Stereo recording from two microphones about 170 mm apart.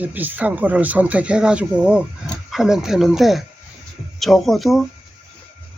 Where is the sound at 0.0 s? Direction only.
10° right (ahead or behind).